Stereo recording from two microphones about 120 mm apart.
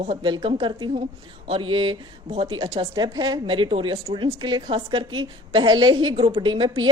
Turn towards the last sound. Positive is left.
turn(degrees=-40)  # may be behind; listen again after turning